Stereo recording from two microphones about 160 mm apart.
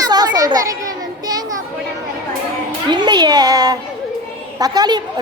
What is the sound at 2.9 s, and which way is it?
A woman's voice, 25° right (ahead or behind).